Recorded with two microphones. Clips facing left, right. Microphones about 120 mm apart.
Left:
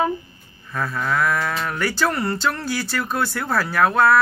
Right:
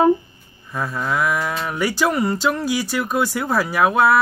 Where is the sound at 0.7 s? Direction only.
15° right (ahead or behind).